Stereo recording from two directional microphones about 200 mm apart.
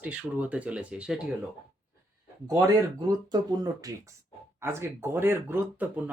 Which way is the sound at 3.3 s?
20° right (ahead or behind).